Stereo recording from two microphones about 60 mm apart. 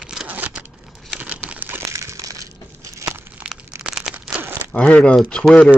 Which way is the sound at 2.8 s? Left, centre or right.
Right.